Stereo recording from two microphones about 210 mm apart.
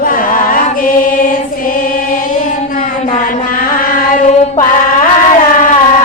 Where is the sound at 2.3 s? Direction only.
40° left (ahead or behind).